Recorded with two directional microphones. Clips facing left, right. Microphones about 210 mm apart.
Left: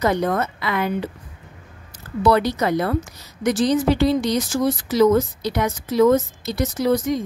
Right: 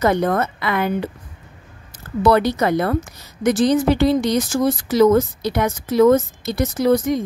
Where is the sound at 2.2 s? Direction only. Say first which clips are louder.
Right 2 dB; 55° right (ahead or behind).